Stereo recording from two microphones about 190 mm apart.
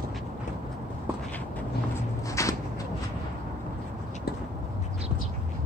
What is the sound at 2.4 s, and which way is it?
Shuffle, 15° left (ahead or behind).